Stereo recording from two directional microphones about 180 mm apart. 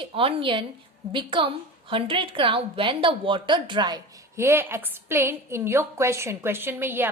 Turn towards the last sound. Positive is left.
turn(degrees=-10)  # may be behind; listen again after turning